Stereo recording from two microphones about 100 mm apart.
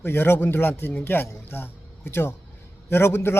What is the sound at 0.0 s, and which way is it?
A man's voice, 20° left (ahead or behind).